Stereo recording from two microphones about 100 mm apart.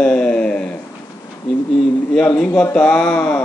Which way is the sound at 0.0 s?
10° left (ahead or behind).